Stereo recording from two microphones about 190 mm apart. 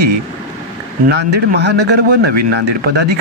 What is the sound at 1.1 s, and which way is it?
Speech, 60° right (ahead or behind).